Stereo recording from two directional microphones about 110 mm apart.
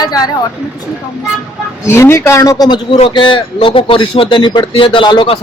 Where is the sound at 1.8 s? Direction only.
25° left (ahead or behind).